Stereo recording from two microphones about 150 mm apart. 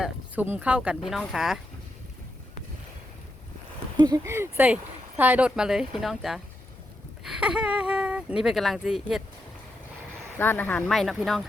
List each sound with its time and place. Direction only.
0.0 s speech: 10° right (ahead or behind)
3.9 s speech: 30° right (ahead or behind)
4.2 s speech: 15° right (ahead or behind)
10.3 s speech: 15° left (ahead or behind)
10.9 s speech: centre (ahead or behind)